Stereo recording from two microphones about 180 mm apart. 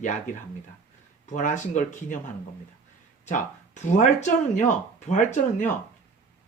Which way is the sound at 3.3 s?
45° left (ahead or behind).